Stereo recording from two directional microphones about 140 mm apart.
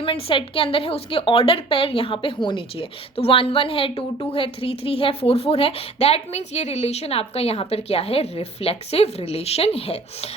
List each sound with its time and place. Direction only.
0.0 s a woman's voice: 40° left (ahead or behind)